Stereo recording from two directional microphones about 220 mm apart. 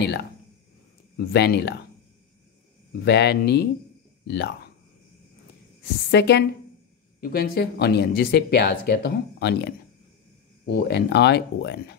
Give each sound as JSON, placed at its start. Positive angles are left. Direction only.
{"t": 0.0, "sound": "speech", "side_deg": 50}
{"t": 3.1, "sound": "speech", "side_deg": 50}
{"t": 6.1, "sound": "speech", "side_deg": 50}